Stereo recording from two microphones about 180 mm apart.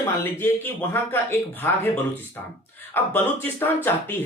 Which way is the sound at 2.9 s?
10° left (ahead or behind).